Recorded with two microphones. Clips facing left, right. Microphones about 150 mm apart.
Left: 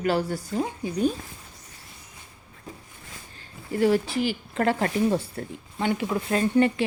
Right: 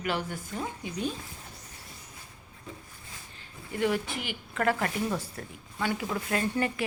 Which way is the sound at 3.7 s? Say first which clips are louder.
Left 7 dB; 35° left (ahead or behind).